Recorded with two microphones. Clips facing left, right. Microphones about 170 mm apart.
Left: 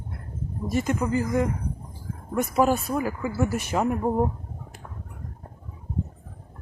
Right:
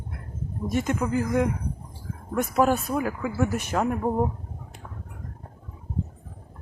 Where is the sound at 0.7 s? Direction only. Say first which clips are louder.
Left 1 dB; centre (ahead or behind).